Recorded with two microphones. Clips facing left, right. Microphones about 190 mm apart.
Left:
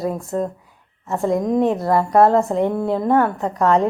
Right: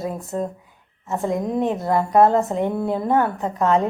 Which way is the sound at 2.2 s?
Centre (ahead or behind).